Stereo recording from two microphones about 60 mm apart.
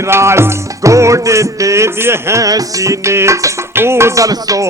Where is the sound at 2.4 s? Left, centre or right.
Right.